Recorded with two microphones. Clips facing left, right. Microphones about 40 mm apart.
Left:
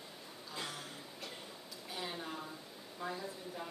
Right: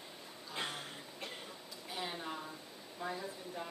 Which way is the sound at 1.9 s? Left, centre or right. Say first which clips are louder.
Right 1 dB; centre.